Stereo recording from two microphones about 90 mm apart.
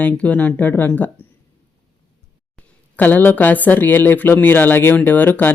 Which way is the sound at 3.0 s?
20° left (ahead or behind).